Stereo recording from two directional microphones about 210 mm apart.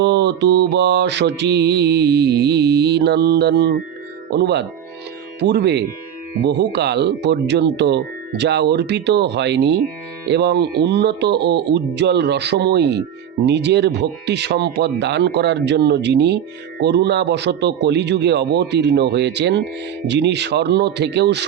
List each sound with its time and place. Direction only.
0.0 s mantra: 55° right (ahead or behind)